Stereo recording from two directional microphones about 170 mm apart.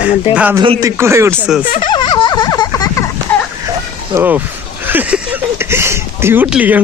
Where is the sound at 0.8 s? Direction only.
15° right (ahead or behind).